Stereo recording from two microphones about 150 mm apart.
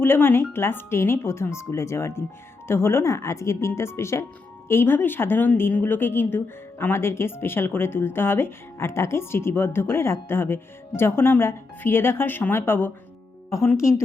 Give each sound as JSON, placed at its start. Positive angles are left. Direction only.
{"t": 0.0, "sound": "a woman's voice", "side_deg": 15}